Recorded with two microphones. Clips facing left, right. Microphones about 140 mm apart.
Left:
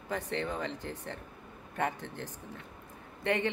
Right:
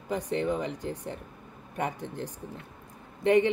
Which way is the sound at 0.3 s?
20° right (ahead or behind).